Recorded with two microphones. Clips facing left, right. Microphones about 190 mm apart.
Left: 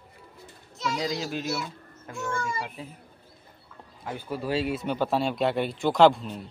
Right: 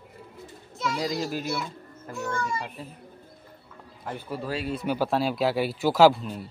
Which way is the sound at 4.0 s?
Centre (ahead or behind).